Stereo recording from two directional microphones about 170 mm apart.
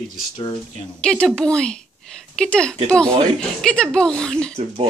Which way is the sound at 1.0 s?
5° left (ahead or behind).